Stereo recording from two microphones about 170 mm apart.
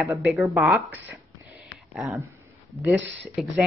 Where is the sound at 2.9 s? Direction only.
90° right.